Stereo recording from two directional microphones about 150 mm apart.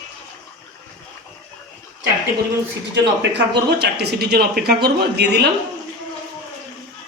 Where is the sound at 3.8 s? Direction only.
90° right.